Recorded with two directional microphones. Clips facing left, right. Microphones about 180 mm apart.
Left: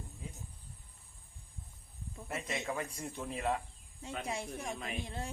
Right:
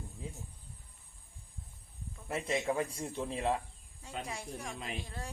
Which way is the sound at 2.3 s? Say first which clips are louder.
Right 5 dB; 30° right (ahead or behind).